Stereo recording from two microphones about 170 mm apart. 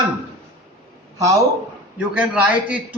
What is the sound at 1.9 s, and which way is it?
Speech, 10° right (ahead or behind).